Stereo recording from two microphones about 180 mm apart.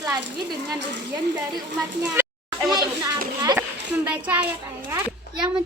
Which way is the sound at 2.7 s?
20° right (ahead or behind).